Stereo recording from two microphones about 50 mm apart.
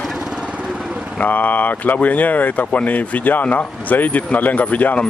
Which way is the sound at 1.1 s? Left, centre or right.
Left.